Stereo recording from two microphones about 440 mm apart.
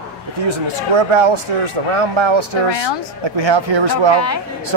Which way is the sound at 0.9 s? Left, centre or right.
Right.